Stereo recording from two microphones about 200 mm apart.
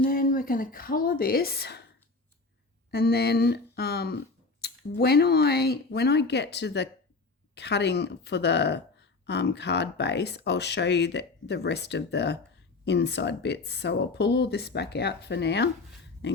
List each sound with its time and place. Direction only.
0.0 s speech: 45° left (ahead or behind)
2.9 s speech: 50° left (ahead or behind)